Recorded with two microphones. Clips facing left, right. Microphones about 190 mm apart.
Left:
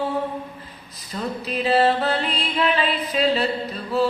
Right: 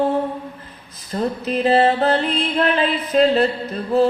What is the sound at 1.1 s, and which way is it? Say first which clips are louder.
Music: right 5 dB; 50° right (ahead or behind).